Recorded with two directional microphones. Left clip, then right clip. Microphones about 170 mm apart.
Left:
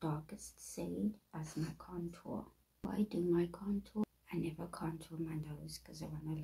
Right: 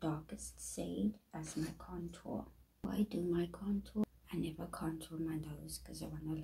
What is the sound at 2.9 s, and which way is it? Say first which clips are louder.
Speech: left 2 dB; 15° left (ahead or behind).